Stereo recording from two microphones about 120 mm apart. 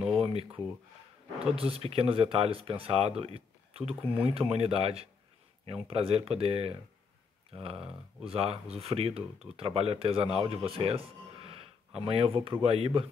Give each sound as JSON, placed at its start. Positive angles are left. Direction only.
{"t": 0.2, "sound": "speech", "side_deg": -55}
{"t": 1.6, "sound": "speech", "side_deg": -55}